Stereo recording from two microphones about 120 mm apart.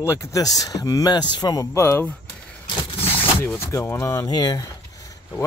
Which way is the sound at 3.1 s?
15° left (ahead or behind).